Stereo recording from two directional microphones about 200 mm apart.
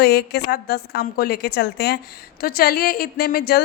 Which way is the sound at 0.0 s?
55° left (ahead or behind).